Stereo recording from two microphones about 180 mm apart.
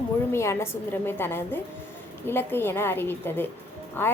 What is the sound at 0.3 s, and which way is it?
A woman's voice, 15° left (ahead or behind).